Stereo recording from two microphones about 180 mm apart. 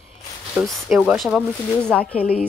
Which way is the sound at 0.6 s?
Centre (ahead or behind).